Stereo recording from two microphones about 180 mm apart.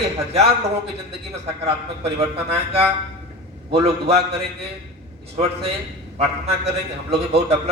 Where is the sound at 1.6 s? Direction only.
35° right (ahead or behind).